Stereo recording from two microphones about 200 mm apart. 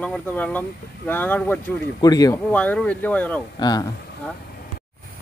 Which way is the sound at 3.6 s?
20° left (ahead or behind).